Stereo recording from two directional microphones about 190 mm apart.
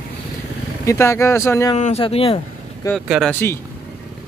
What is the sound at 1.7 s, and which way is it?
Speech, 35° left (ahead or behind).